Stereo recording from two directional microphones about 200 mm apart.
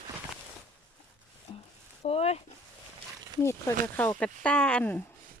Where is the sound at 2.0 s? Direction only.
30° left (ahead or behind).